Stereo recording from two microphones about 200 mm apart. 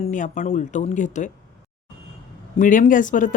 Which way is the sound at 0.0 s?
40° left (ahead or behind).